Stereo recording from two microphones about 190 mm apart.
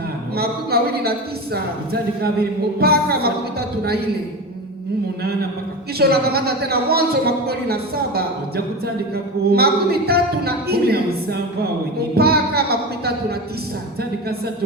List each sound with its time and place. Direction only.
0.3 s a woman's voice: 55° right (ahead or behind)
6.0 s a woman's voice: 55° right (ahead or behind)